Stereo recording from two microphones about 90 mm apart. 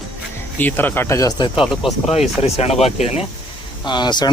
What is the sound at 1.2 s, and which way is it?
Speech, 40° left (ahead or behind).